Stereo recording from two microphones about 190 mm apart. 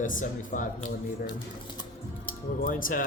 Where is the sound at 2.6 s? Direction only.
45° left (ahead or behind).